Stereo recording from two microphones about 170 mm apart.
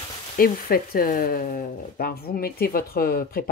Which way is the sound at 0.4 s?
60° left (ahead or behind).